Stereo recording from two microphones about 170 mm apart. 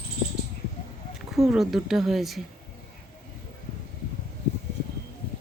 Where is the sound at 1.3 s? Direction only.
Centre (ahead or behind).